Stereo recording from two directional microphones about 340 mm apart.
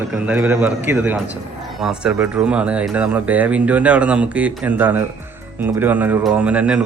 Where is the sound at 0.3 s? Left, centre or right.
Centre.